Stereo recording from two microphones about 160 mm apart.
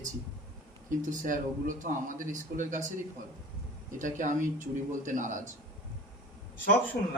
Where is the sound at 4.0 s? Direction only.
55° right (ahead or behind).